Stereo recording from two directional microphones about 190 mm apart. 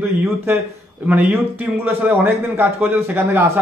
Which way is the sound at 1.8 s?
10° right (ahead or behind).